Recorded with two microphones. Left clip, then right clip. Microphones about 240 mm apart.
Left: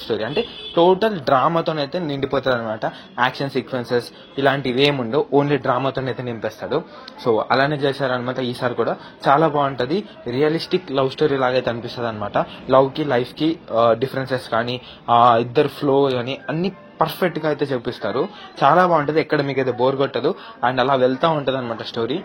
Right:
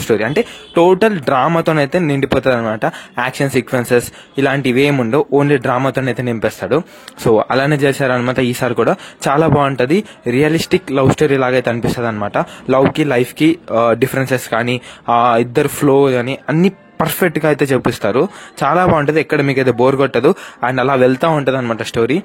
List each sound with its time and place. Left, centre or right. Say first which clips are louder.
0.1 s a man's voice: right 7 dB; right